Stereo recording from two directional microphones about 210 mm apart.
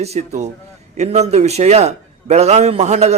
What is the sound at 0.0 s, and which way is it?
A man's voice, 30° right (ahead or behind).